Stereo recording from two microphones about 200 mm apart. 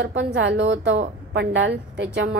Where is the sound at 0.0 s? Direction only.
65° right (ahead or behind).